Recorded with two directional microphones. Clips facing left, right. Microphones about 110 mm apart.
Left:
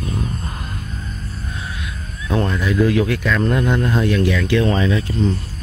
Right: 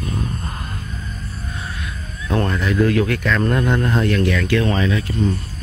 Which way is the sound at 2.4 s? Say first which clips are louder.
Left 1 dB; 15° left (ahead or behind).